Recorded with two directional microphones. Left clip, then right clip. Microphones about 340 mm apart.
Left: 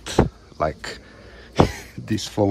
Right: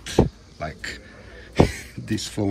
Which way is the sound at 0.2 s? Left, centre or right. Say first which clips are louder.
Even; centre.